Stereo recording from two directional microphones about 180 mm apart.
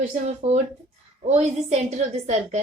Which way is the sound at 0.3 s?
40° right (ahead or behind).